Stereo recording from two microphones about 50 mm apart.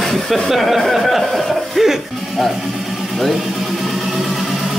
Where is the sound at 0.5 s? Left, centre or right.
Centre.